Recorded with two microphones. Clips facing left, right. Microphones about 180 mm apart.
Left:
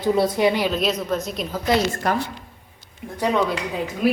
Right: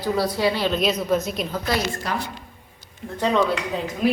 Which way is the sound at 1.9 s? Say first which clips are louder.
Left 5 dB; 50° left (ahead or behind).